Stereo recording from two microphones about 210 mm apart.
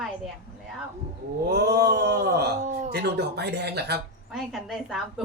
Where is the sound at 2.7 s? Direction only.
35° right (ahead or behind).